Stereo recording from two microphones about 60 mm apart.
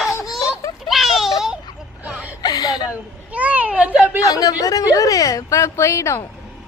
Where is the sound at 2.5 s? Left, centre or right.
Left.